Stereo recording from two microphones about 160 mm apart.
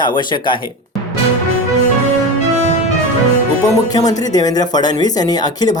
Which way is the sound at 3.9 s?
25° left (ahead or behind).